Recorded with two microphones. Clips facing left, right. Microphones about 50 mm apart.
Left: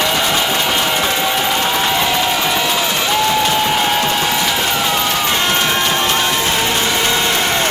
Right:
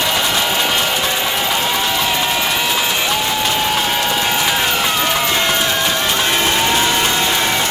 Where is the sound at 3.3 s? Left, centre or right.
Centre.